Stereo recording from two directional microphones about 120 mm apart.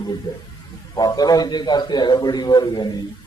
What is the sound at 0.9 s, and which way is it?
A man's voice, 35° left (ahead or behind).